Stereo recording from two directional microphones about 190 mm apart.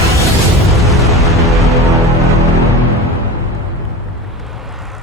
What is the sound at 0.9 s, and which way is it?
Music, centre (ahead or behind).